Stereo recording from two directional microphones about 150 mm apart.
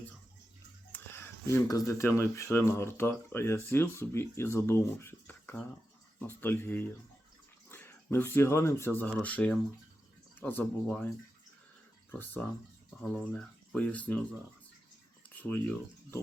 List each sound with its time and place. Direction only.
0.9 s speech: 15° left (ahead or behind)
12.2 s speech: 10° left (ahead or behind)
15.4 s speech: 10° left (ahead or behind)